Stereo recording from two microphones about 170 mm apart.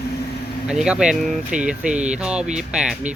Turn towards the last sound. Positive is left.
turn(degrees=-5)  # may be behind; listen again after turning